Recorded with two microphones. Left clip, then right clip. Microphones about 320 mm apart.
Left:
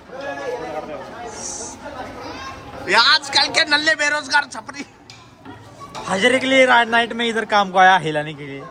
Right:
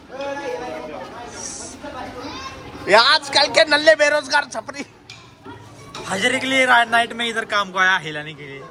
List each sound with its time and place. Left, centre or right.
2.8 s a man's voice: centre
6.1 s speech: left